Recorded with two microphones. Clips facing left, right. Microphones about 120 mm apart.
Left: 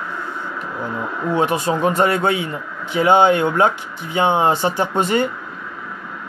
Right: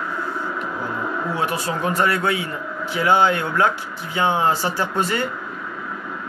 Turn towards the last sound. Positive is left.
turn(degrees=20)  # may be behind; listen again after turning